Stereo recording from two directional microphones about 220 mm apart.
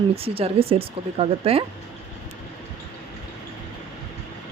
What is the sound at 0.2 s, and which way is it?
Speech, 25° right (ahead or behind).